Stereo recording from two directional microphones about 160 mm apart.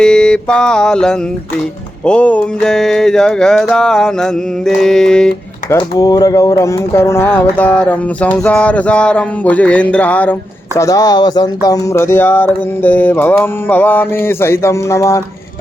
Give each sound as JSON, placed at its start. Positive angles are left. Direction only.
{"t": 0.0, "sound": "a sound", "side_deg": 5}
{"t": 5.7, "sound": "speech", "side_deg": 25}
{"t": 10.8, "sound": "speech", "side_deg": 20}